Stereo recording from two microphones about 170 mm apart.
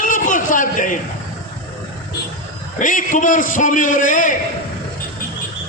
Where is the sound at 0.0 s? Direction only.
50° left (ahead or behind).